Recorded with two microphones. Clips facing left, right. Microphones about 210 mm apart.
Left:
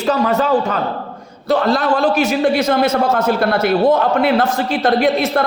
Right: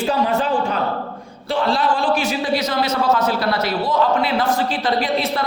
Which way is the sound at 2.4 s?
55° left (ahead or behind).